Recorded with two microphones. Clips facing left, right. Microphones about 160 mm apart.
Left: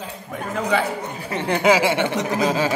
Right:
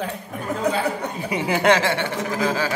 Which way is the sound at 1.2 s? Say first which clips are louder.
Left 1 dB; 10° right (ahead or behind).